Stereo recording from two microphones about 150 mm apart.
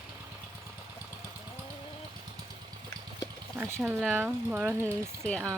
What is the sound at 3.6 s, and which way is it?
Speech, 15° right (ahead or behind).